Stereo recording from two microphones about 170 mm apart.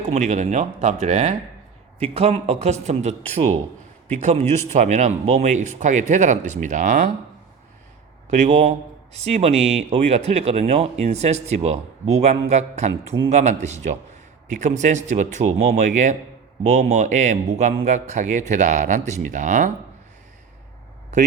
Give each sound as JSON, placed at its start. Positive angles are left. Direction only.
{"t": 0.1, "sound": "speech", "side_deg": -45}
{"t": 8.3, "sound": "speech", "side_deg": -45}